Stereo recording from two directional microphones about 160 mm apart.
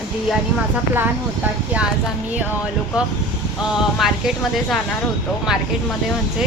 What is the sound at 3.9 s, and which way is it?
Speech, centre (ahead or behind).